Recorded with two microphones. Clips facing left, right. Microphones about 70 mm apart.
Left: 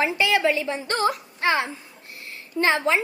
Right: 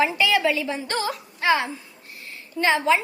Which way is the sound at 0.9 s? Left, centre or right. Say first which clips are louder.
Left 4 dB; left.